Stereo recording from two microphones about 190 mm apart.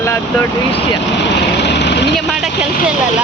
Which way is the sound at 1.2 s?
65° left (ahead or behind).